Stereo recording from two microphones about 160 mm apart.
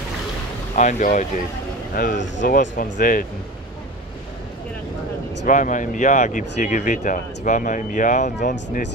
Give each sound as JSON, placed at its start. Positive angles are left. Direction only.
{"t": 0.7, "sound": "speech", "side_deg": 50}
{"t": 2.0, "sound": "speech", "side_deg": 65}
{"t": 5.5, "sound": "speech", "side_deg": 55}